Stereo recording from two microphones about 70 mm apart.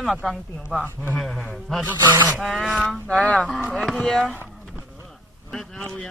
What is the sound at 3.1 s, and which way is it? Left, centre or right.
Speech, centre.